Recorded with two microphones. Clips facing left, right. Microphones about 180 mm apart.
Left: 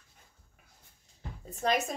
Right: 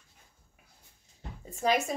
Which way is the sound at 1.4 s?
5° right (ahead or behind).